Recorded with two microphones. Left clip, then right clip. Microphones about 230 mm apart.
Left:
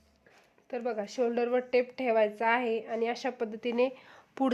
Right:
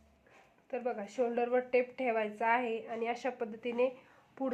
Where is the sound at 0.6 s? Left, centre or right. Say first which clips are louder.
Left 3 dB; left.